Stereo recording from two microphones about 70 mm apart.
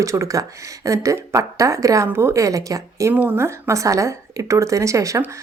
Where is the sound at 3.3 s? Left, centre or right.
Right.